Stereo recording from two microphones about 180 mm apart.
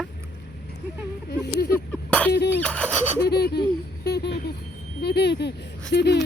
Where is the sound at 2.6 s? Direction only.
5° left (ahead or behind).